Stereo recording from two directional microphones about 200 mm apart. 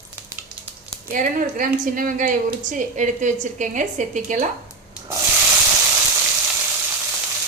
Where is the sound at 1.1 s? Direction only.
40° right (ahead or behind).